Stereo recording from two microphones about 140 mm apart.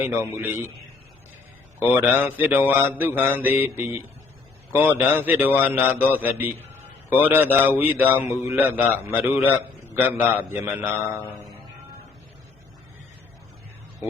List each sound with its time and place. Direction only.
0.0 s a man's voice: 15° right (ahead or behind)
1.9 s a man's voice: 10° right (ahead or behind)